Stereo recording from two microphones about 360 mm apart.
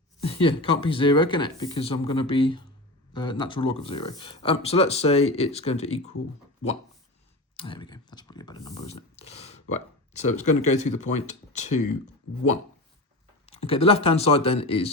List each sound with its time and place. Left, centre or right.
0.2 s speech: centre
7.5 s speech: centre
13.4 s speech: centre